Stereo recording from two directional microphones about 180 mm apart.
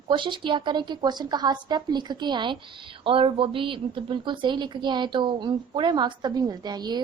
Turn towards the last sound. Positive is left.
turn(degrees=-25)  # may be behind; listen again after turning